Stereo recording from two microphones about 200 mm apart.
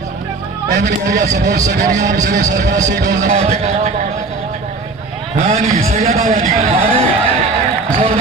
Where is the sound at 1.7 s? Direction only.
40° right (ahead or behind).